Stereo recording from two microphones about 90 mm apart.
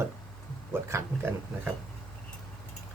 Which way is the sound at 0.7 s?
30° right (ahead or behind).